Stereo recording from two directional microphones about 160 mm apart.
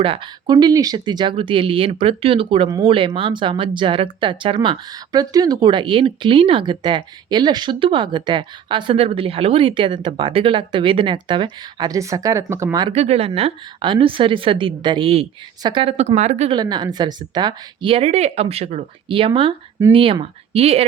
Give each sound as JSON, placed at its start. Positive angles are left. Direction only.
{"t": 0.0, "sound": "speech", "side_deg": -35}
{"t": 12.9, "sound": "speech", "side_deg": -40}
{"t": 16.5, "sound": "speech", "side_deg": -25}